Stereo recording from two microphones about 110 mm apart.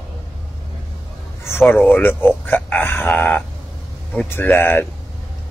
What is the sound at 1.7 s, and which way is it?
Speech, 15° left (ahead or behind).